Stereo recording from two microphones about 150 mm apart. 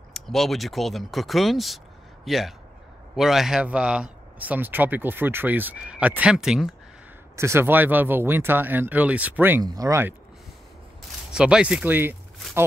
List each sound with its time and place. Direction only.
0.1 s a man's voice: centre (ahead or behind)
7.3 s speech: 15° right (ahead or behind)
9.6 s speech: 25° right (ahead or behind)
11.0 s speech: 5° right (ahead or behind)